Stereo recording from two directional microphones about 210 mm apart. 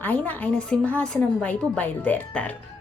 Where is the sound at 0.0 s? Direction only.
5° left (ahead or behind).